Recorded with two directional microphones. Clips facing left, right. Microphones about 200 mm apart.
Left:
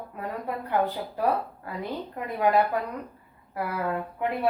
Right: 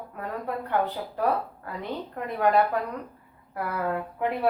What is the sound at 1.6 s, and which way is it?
A woman's voice, 10° left (ahead or behind).